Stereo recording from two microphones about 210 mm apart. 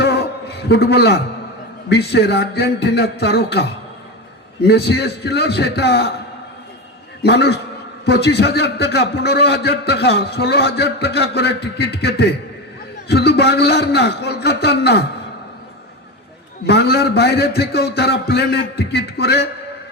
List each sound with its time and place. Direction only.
0.0 s a sound: 50° left (ahead or behind)
1.9 s a man's voice: 50° left (ahead or behind)
7.2 s a man's voice: 50° left (ahead or behind)
16.6 s a man's voice: 50° left (ahead or behind)